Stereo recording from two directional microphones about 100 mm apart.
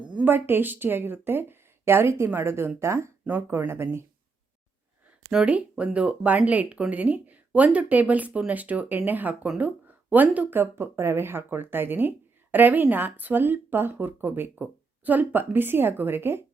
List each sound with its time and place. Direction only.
0.1 s speech: 15° right (ahead or behind)
5.3 s speech: 10° right (ahead or behind)